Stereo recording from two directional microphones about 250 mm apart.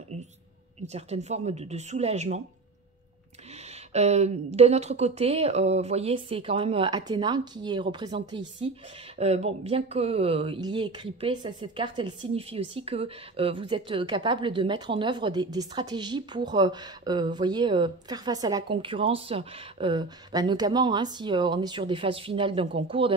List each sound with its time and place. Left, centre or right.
0.8 s speech: right
3.9 s speech: right